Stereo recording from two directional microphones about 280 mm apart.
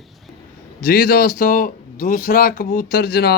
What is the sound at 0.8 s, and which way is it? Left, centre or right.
Speech, left.